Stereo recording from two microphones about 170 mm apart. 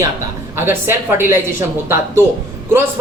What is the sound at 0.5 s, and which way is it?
A woman's voice, 15° right (ahead or behind).